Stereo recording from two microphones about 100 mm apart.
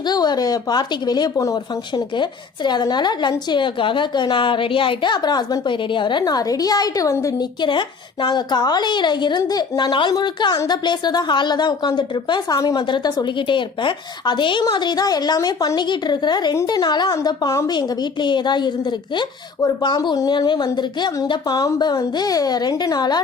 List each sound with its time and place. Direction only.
0.0 s a woman's voice: 45° left (ahead or behind)
2.1 s a woman's voice: 50° left (ahead or behind); by 7.4 s 30° left (ahead or behind)
7.6 s a woman's voice: 50° left (ahead or behind)